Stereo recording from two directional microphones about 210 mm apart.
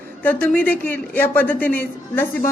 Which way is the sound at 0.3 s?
5° left (ahead or behind).